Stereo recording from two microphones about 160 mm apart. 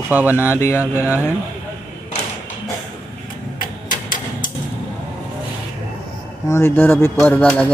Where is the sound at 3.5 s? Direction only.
55° left (ahead or behind).